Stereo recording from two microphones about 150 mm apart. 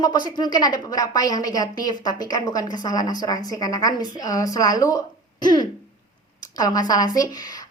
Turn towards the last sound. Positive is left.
turn(degrees=25)  # may be behind; listen again after turning